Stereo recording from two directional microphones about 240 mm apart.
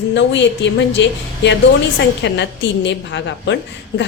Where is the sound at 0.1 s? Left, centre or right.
Left.